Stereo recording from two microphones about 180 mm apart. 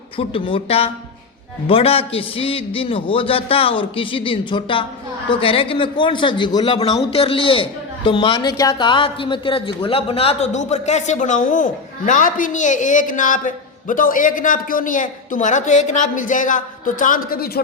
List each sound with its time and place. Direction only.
0.2 s speech: 30° left (ahead or behind); by 17.6 s 55° left (ahead or behind)